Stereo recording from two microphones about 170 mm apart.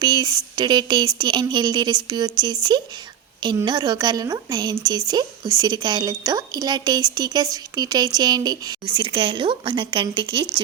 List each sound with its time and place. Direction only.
0.0 s a woman's voice: 25° right (ahead or behind)